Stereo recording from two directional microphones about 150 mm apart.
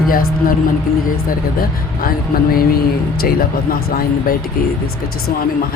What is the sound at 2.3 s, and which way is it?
Speech, 90° left.